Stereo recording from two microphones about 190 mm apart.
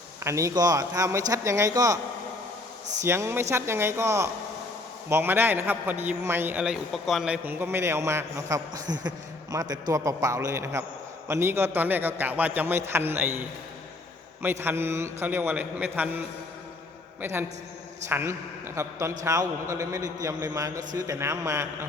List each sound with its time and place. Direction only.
0.2 s a man's voice: 15° right (ahead or behind)
3.0 s a man's voice: 15° right (ahead or behind)
14.4 s a man's voice: 10° right (ahead or behind)
17.2 s a man's voice: 10° right (ahead or behind)